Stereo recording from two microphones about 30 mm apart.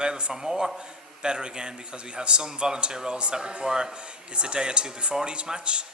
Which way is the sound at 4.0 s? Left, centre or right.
Right.